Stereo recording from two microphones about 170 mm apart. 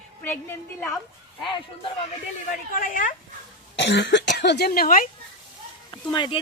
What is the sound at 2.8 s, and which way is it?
Speech, 50° left (ahead or behind).